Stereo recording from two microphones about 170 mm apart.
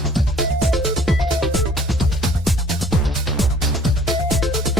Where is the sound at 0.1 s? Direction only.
Centre (ahead or behind).